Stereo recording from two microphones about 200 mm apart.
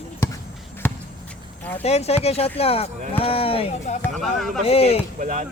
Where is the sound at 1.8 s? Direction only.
30° left (ahead or behind).